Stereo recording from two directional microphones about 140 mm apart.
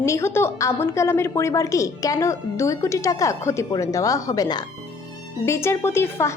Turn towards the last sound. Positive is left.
turn(degrees=20)  # may be behind; listen again after turning